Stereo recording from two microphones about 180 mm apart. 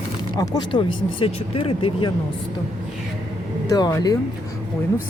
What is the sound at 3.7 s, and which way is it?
Speech, 20° left (ahead or behind).